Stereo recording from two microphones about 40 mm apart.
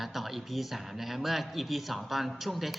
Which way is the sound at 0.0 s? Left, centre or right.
Centre.